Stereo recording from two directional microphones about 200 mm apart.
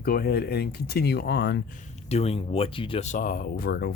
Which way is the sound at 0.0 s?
50° left (ahead or behind).